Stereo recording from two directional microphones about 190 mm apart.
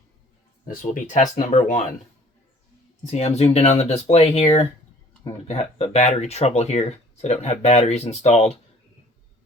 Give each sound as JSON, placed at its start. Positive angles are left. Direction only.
{"t": 0.6, "sound": "speech", "side_deg": 45}
{"t": 3.0, "sound": "speech", "side_deg": 35}